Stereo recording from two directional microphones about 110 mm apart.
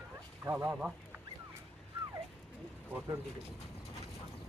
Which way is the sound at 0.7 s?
5° right (ahead or behind).